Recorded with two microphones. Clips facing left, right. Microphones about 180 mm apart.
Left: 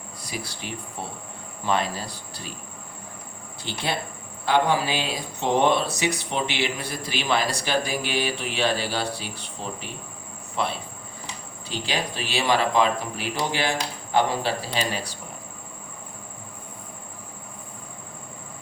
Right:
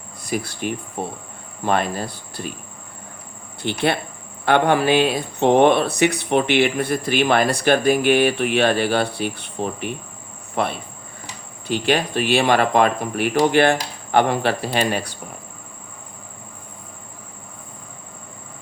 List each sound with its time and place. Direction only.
0.3 s speech: 50° right (ahead or behind)
3.6 s speech: 60° right (ahead or behind)